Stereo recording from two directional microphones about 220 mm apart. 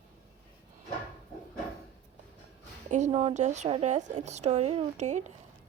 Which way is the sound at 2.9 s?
30° right (ahead or behind).